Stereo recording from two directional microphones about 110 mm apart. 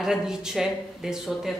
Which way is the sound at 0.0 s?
5° right (ahead or behind).